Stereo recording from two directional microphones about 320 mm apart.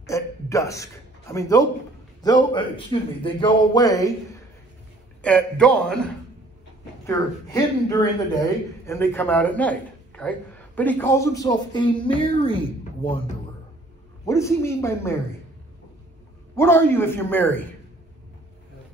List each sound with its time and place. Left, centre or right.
0.0 s a sound: centre
1.3 s a man's voice: centre
5.2 s a man's voice: centre
7.1 s a man's voice: centre
14.2 s a man's voice: centre
16.5 s a man's voice: centre